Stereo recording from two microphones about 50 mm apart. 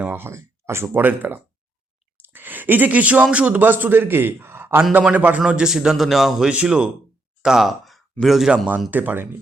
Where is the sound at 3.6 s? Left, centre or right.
Right.